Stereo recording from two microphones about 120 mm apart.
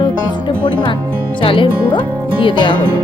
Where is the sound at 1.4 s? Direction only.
45° left (ahead or behind).